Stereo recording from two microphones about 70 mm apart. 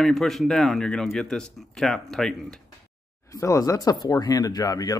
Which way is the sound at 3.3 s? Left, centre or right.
Left.